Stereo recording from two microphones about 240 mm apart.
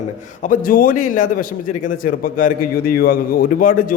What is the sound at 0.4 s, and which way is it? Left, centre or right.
A man's voice, left.